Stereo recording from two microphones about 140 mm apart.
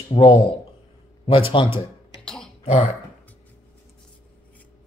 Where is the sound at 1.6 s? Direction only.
40° left (ahead or behind).